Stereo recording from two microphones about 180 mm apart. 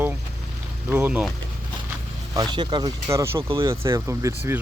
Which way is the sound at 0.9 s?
10° right (ahead or behind).